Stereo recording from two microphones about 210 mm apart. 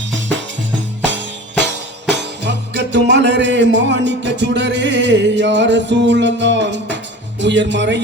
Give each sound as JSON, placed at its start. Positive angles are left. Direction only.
{"t": 1.5, "sound": "music", "side_deg": -55}